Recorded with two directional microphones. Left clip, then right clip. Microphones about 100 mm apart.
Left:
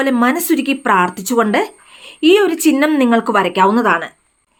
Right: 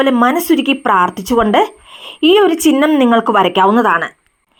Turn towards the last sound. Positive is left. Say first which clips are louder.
# right 2 dB
turn(degrees=-35)  # may be behind; listen again after turning